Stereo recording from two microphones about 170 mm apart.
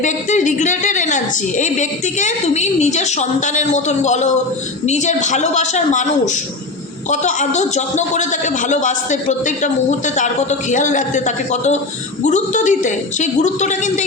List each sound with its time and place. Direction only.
0.0 s a woman's voice: 45° left (ahead or behind)